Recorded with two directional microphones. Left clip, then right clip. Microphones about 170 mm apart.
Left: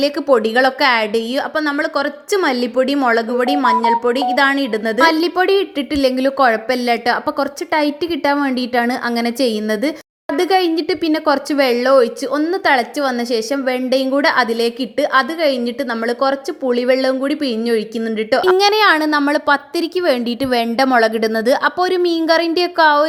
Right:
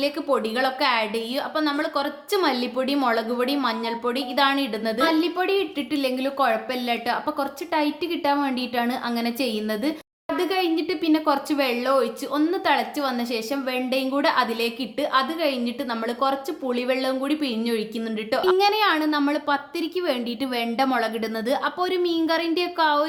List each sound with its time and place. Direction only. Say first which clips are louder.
0.0 s speech: left 9 dB; 40° left (ahead or behind)